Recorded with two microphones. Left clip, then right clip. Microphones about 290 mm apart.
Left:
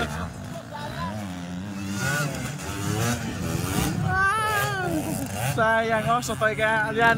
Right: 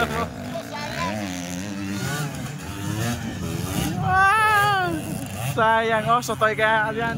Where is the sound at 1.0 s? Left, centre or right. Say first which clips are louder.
Right 8 dB; right.